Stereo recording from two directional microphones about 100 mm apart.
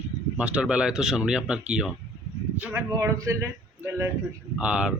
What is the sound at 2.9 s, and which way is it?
Speech, 35° right (ahead or behind).